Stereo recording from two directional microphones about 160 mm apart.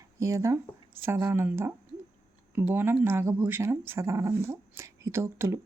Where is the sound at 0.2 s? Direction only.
20° right (ahead or behind).